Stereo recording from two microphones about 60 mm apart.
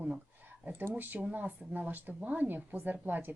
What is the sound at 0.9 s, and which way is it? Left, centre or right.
Speech, right.